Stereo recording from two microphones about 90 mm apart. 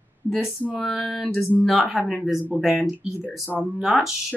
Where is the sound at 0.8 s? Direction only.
10° left (ahead or behind).